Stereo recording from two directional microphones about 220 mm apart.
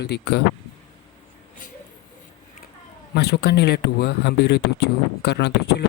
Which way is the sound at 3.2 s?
45° left (ahead or behind).